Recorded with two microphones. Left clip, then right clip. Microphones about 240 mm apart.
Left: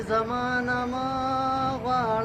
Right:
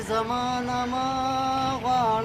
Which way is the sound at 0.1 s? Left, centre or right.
Right.